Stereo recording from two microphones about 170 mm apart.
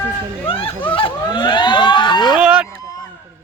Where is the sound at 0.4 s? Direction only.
30° left (ahead or behind).